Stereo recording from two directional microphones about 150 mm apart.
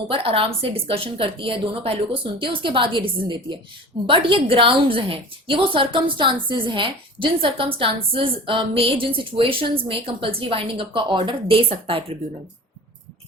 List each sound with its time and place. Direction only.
0.1 s a woman's voice: 35° right (ahead or behind)